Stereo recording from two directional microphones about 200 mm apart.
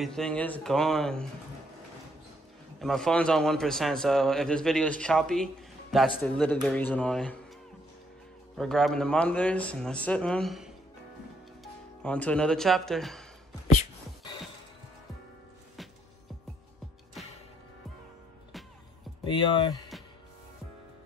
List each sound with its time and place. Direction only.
0.0 s a man's voice: 5° left (ahead or behind)
2.8 s a man's voice: 5° left (ahead or behind)
8.5 s a man's voice: centre (ahead or behind)
19.2 s speech: 25° left (ahead or behind)